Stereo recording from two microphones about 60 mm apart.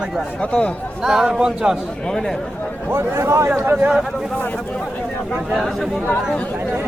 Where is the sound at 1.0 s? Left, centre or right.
Centre.